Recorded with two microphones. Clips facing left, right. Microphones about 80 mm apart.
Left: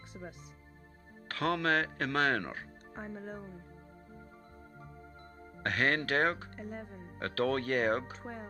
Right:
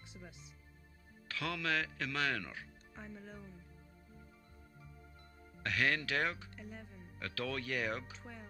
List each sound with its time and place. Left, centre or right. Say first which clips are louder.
0.2 s speech: left 9 dB; left
5.6 s speech: left 4 dB; left